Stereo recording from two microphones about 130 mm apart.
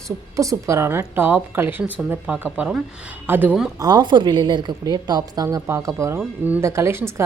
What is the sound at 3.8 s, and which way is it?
A woman's voice, 35° right (ahead or behind).